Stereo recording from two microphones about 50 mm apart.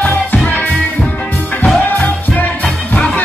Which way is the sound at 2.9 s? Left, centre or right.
Left.